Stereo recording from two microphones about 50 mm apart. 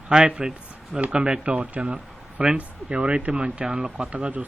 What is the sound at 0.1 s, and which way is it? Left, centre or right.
A man's voice, centre.